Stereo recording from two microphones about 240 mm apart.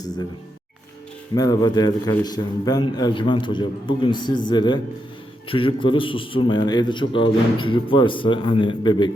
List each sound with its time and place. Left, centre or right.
1.4 s a man's voice: centre